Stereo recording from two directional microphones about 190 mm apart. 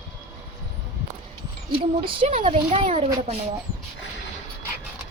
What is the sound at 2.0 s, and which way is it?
Speech, 30° right (ahead or behind).